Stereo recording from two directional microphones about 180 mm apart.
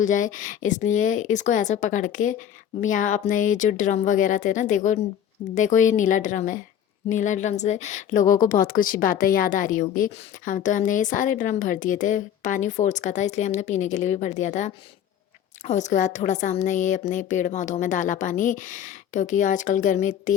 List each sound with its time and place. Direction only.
0.0 s speech: 45° left (ahead or behind)